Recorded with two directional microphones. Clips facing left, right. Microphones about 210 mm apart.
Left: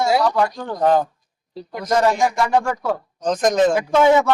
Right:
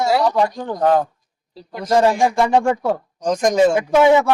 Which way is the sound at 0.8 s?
Centre (ahead or behind).